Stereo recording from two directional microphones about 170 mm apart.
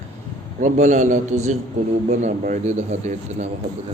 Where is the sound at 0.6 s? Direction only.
45° right (ahead or behind).